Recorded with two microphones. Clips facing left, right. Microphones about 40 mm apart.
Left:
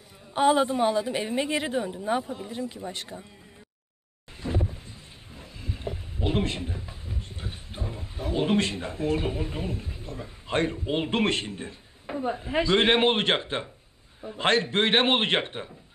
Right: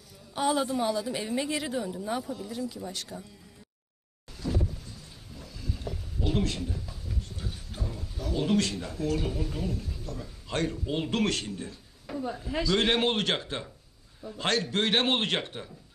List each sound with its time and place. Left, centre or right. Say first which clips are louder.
0.3 s a woman's voice: left 6 dB; left
4.4 s a sound: left 2 dB; left
14.2 s a woman's voice: left 5 dB; left